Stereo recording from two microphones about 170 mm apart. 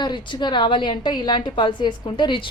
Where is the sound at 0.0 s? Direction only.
25° left (ahead or behind).